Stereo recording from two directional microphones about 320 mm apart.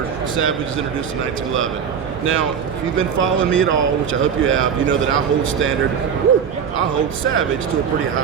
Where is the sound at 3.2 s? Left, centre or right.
Right.